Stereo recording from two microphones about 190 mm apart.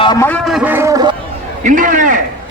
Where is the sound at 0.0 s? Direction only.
20° left (ahead or behind).